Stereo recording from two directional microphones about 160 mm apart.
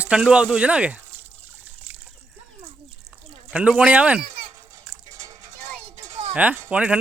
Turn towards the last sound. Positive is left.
turn(degrees=-10)  # may be behind; listen again after turning